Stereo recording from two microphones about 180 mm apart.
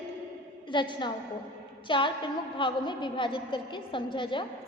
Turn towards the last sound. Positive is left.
turn(degrees=25)  # may be behind; listen again after turning